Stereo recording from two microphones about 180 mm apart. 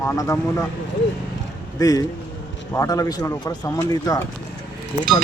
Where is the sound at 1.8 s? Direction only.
20° left (ahead or behind).